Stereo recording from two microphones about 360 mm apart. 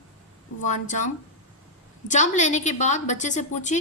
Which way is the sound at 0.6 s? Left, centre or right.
Left.